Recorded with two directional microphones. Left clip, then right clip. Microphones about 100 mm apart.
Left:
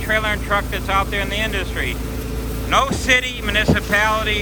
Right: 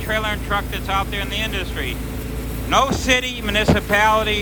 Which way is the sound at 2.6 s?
60° right (ahead or behind).